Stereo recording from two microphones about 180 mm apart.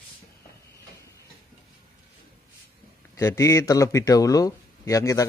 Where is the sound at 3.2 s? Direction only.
15° left (ahead or behind).